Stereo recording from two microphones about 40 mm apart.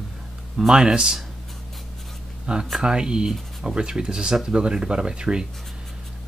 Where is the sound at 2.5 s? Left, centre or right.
Right.